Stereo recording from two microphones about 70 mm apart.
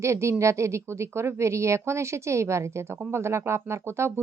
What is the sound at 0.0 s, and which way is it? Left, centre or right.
Speech, right.